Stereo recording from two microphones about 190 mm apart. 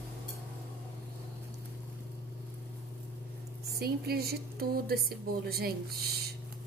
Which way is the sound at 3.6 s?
55° right (ahead or behind).